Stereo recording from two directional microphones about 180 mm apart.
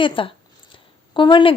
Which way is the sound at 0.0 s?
30° left (ahead or behind).